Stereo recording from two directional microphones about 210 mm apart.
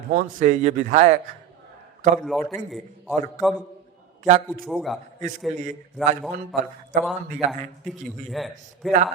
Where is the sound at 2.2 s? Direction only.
Centre (ahead or behind).